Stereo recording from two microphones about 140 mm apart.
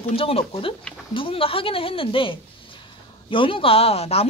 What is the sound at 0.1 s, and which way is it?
A woman's voice, 45° left (ahead or behind).